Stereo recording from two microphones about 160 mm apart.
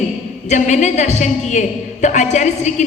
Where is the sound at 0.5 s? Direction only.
45° left (ahead or behind).